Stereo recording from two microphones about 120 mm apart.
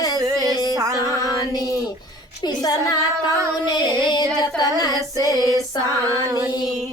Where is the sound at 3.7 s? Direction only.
35° left (ahead or behind).